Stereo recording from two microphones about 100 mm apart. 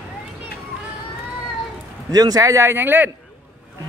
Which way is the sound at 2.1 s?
40° right (ahead or behind).